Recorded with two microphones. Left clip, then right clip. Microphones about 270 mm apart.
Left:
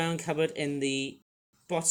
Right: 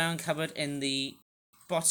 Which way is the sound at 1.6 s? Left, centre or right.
Centre.